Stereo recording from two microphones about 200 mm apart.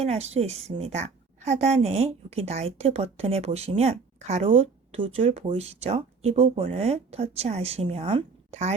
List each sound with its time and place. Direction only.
0.0 s a woman's voice: 30° right (ahead or behind)